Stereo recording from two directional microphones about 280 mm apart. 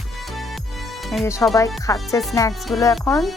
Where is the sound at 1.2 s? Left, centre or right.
Centre.